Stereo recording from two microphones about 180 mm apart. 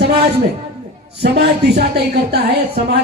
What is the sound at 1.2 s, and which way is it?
Speech, 65° right (ahead or behind).